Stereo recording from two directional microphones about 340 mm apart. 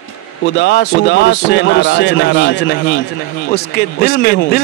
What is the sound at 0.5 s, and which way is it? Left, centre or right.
A man's voice, left.